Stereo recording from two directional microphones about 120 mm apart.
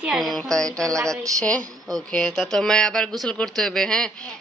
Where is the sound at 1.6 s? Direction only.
35° right (ahead or behind).